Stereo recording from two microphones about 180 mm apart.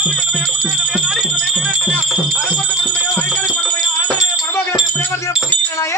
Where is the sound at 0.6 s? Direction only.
Centre (ahead or behind).